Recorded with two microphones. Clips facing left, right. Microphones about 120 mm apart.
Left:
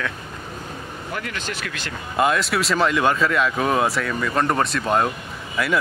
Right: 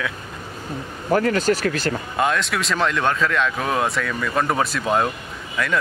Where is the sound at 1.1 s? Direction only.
40° right (ahead or behind).